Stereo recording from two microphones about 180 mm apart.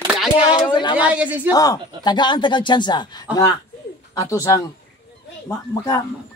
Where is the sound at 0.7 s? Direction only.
25° left (ahead or behind).